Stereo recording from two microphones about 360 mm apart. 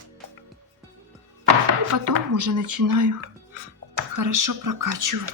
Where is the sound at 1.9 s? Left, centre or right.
Right.